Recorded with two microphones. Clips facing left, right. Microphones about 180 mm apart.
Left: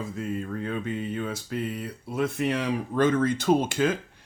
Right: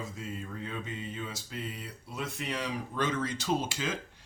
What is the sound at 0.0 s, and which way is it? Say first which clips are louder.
Music: left 8 dB; 55° left (ahead or behind).